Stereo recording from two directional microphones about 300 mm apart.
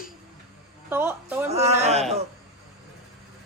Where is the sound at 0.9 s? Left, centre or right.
Centre.